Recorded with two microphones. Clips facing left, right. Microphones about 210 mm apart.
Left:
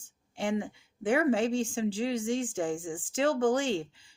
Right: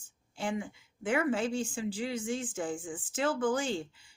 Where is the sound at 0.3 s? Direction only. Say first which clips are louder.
Left 4 dB; 30° left (ahead or behind).